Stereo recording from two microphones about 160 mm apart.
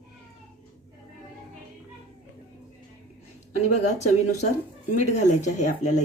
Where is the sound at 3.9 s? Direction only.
45° left (ahead or behind).